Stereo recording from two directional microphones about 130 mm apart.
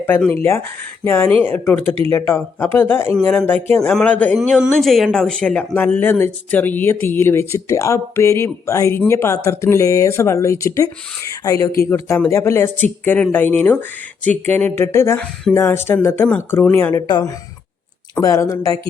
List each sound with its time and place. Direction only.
1.0 s speech: 20° left (ahead or behind)
4.4 s speech: centre (ahead or behind); by 17.0 s 15° left (ahead or behind)
17.1 s a woman's voice: 35° left (ahead or behind)